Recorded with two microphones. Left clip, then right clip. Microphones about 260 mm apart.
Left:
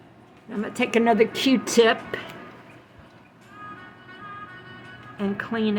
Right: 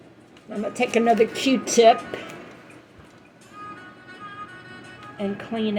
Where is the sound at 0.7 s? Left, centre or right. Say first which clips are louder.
Right 1 dB; left.